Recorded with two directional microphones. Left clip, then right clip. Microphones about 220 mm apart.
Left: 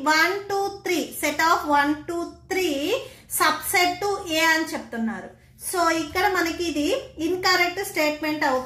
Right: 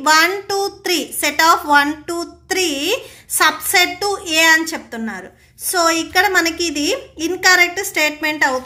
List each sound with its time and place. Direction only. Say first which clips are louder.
0.0 s a woman's voice: right 7 dB; 40° right (ahead or behind)